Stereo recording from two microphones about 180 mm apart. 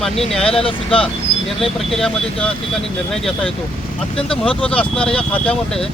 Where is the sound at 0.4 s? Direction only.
30° left (ahead or behind).